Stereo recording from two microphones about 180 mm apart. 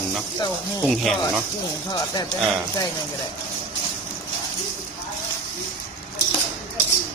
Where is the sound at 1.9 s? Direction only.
20° left (ahead or behind).